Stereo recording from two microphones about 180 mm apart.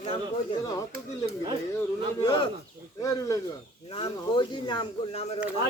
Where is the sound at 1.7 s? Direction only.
20° left (ahead or behind).